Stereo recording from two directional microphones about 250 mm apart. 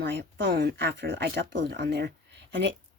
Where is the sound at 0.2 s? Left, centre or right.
Right.